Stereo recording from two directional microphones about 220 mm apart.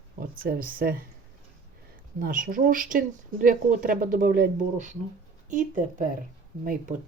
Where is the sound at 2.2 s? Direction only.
40° right (ahead or behind).